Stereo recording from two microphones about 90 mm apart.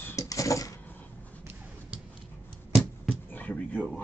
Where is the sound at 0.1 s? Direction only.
35° left (ahead or behind).